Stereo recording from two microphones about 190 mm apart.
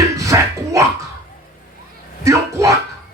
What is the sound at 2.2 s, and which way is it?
Speech, 15° right (ahead or behind).